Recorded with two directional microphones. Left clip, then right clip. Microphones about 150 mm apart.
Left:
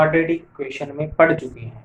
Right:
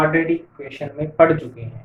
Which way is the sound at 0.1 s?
45° left (ahead or behind).